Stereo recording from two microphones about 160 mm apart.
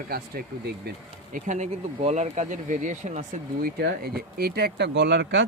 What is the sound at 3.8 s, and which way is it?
Speech, 80° right.